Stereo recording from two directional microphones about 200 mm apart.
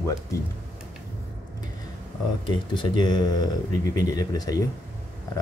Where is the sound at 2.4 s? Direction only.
25° left (ahead or behind).